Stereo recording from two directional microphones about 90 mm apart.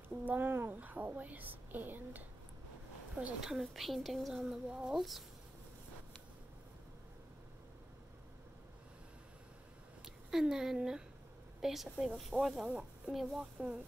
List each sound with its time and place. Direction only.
0.1 s speech: 20° right (ahead or behind)
3.3 s speech: 5° right (ahead or behind)
10.0 s speech: 5° right (ahead or behind)
12.6 s speech: 10° right (ahead or behind)